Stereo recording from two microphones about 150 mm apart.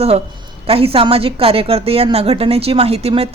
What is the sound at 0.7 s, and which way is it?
Speech, 40° right (ahead or behind).